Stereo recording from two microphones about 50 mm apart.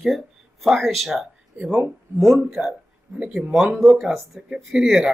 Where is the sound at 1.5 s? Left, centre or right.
Right.